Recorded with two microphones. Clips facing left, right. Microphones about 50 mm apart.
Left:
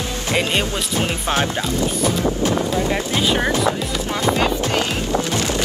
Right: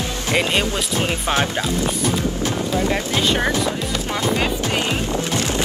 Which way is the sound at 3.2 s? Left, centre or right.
Centre.